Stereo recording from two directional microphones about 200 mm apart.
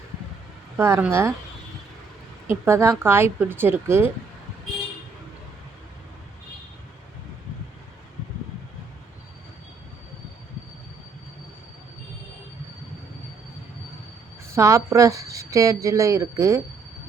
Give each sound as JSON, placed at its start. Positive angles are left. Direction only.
{"t": 0.8, "sound": "speech", "side_deg": -10}
{"t": 2.5, "sound": "speech", "side_deg": -15}
{"t": 14.5, "sound": "speech", "side_deg": -15}